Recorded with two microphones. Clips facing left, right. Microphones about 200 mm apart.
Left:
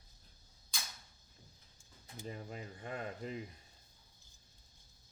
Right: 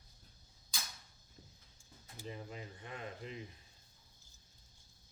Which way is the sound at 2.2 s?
45° left (ahead or behind).